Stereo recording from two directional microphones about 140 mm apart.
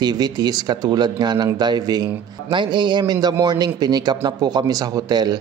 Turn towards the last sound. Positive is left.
turn(degrees=-30)  # may be behind; listen again after turning